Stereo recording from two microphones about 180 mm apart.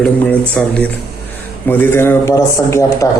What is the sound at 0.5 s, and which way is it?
Speech, 5° left (ahead or behind).